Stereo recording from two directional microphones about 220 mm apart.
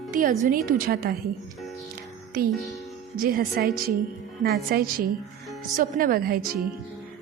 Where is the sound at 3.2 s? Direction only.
40° right (ahead or behind).